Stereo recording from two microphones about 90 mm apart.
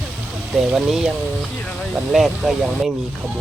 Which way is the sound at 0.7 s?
5° right (ahead or behind).